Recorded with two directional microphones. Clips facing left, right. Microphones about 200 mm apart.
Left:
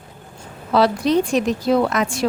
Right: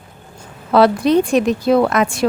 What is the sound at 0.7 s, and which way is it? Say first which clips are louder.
Speech: right 4 dB; 55° right (ahead or behind).